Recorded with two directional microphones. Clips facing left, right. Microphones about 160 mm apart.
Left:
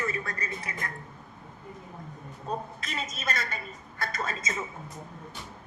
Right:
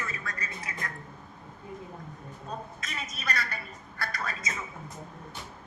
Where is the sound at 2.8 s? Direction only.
25° left (ahead or behind).